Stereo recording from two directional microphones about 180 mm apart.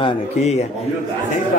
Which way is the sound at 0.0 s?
35° left (ahead or behind).